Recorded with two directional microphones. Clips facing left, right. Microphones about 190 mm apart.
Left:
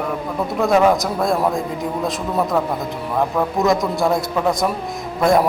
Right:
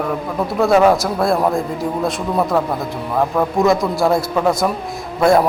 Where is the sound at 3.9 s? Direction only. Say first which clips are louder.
Right 2 dB; centre (ahead or behind).